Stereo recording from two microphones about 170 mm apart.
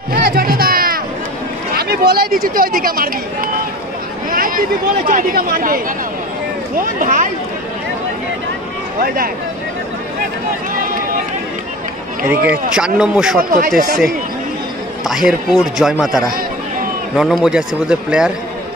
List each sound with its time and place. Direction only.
0.1 s music: 65° right (ahead or behind)
1.8 s speech: 65° right (ahead or behind)
7.0 s speech: 50° right (ahead or behind)
9.0 s speech: 60° right (ahead or behind)
12.3 s a man's voice: 10° right (ahead or behind)
13.5 s speech: 60° right (ahead or behind)
15.0 s a man's voice: 5° right (ahead or behind)